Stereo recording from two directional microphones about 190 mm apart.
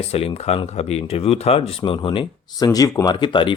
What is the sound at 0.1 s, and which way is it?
Speech, 30° left (ahead or behind).